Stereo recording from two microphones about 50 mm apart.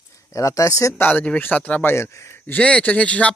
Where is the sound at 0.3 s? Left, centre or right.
Left.